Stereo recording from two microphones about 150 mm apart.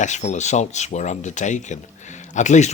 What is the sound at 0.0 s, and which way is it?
Speech, 50° left (ahead or behind).